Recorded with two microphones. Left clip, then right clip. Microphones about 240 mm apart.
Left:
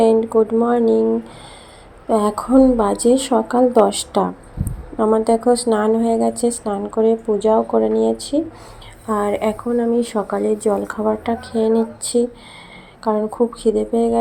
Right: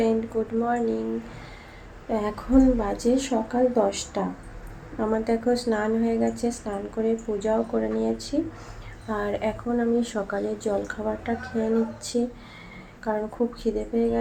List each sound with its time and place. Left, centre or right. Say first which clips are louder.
0.3 s a woman's voice: left 10 dB; left
2.0 s a woman's voice: left 10 dB; left